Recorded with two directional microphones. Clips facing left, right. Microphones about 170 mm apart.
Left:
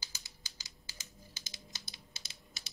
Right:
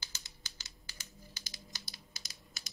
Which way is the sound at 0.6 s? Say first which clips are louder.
Even; 20° left (ahead or behind).